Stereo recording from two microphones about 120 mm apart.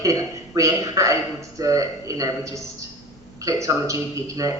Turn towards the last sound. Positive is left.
turn(degrees=-25)  # may be behind; listen again after turning